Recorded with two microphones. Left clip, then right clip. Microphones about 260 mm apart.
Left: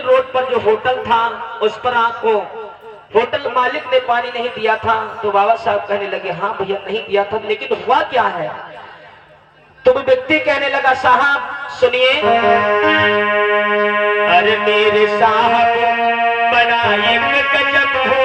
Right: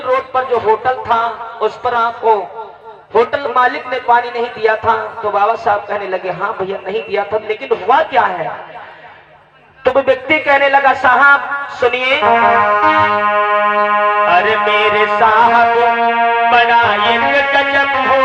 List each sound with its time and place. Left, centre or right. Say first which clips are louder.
0.3 s music: right 1 dB; centre
1.6 s a man's voice: right 1 dB; centre
3.1 s a man's voice: right 2 dB; centre
9.8 s a man's voice: even; centre